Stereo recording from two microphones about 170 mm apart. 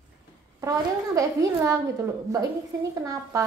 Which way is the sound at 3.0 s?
20° right (ahead or behind).